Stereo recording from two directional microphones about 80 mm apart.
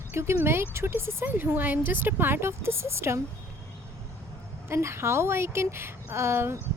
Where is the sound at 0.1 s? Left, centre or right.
Right.